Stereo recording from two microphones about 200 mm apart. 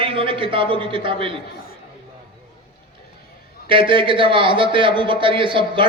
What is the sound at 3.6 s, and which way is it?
A man's voice, 25° right (ahead or behind).